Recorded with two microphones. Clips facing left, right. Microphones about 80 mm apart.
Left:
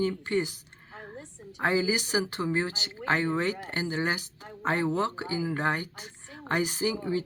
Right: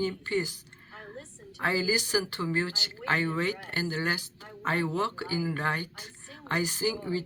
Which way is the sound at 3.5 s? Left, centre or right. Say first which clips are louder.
Left 1 dB; left.